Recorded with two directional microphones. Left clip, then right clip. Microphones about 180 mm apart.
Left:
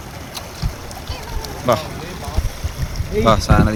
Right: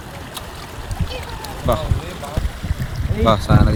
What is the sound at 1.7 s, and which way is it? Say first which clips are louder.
Speech: left 3 dB; centre (ahead or behind).